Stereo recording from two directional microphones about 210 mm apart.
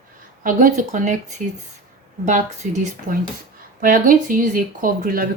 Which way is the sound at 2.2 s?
35° right (ahead or behind).